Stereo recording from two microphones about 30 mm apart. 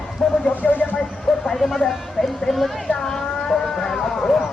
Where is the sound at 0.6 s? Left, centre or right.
Left.